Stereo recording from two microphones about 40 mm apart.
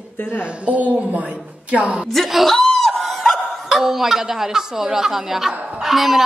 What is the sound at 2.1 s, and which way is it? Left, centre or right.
Speech, centre.